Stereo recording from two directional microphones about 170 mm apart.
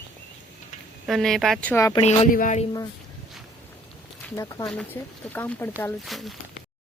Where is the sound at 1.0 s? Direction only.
Centre (ahead or behind).